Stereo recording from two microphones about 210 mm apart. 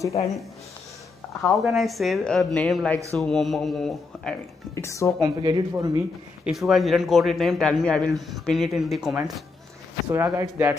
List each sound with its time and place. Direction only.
1.4 s a man's voice: centre (ahead or behind)
4.7 s speech: 15° left (ahead or behind)
5.2 s speech: 20° right (ahead or behind)
6.4 s a man's voice: centre (ahead or behind)
10.0 s a man's voice: 15° right (ahead or behind)